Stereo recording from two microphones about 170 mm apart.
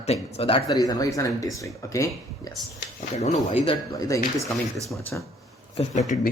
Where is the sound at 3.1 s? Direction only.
40° left (ahead or behind).